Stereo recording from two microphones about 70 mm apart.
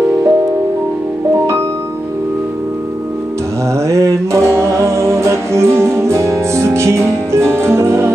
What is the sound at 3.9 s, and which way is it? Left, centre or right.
Music, right.